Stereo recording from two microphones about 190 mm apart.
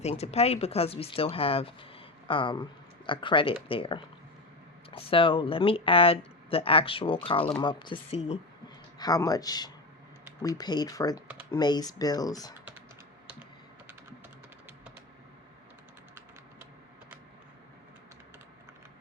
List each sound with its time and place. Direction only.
0.0 s speech: 35° left (ahead or behind)